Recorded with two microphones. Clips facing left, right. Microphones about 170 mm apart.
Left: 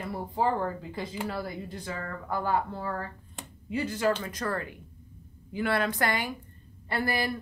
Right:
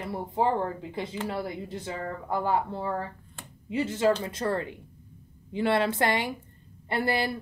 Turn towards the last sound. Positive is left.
turn(degrees=-25)  # may be behind; listen again after turning